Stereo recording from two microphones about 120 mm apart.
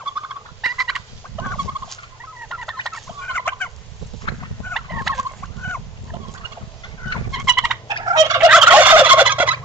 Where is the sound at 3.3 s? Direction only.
15° left (ahead or behind).